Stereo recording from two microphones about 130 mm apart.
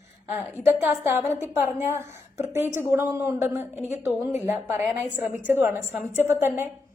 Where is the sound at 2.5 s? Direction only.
20° right (ahead or behind).